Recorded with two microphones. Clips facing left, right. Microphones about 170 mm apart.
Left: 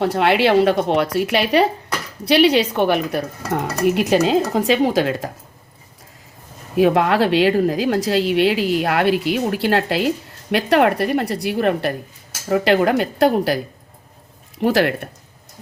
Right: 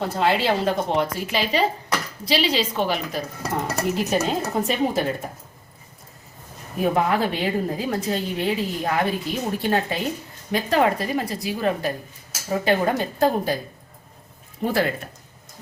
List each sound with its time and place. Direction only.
0.0 s speech: 70° left (ahead or behind)
3.8 s speech: 70° left (ahead or behind); by 5.3 s 90° left
6.7 s a woman's voice: 85° left
14.6 s a woman's voice: 80° left